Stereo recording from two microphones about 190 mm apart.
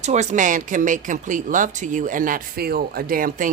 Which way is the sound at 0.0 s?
35° right (ahead or behind).